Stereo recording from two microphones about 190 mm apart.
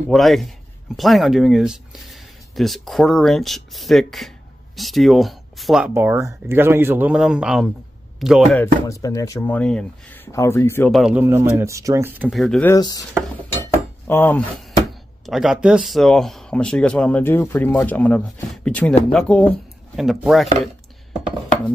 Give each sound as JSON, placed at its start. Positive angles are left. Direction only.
{"t": 0.1, "sound": "speech", "side_deg": 0}
{"t": 8.5, "sound": "speech", "side_deg": 15}
{"t": 10.9, "sound": "speech", "side_deg": 0}
{"t": 12.3, "sound": "speech", "side_deg": 0}
{"t": 12.7, "sound": "chopping", "side_deg": 20}
{"t": 13.7, "sound": "cutlery", "side_deg": 10}
{"t": 15.2, "sound": "speech", "side_deg": 0}